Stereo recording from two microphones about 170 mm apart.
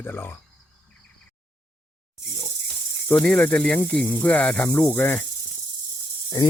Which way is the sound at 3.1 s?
5° left (ahead or behind).